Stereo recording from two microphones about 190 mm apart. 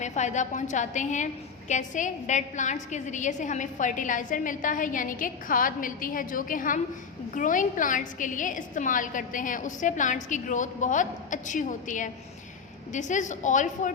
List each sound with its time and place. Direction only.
0.0 s a woman's voice: 40° left (ahead or behind)